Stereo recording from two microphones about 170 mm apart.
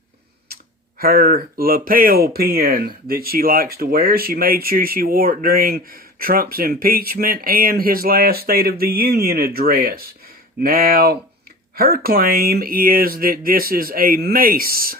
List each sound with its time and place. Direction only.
0.4 s speech: 65° right (ahead or behind)